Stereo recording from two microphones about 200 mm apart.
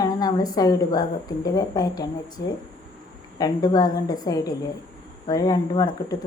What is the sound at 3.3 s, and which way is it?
A woman's voice, 20° left (ahead or behind).